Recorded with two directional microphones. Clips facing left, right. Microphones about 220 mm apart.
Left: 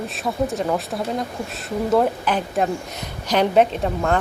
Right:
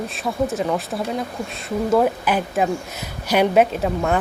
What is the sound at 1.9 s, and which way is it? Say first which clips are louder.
Speech: right 1 dB; 5° right (ahead or behind).